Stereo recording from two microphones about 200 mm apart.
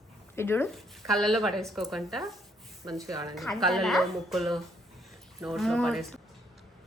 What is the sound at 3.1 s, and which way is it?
Speech, 20° right (ahead or behind).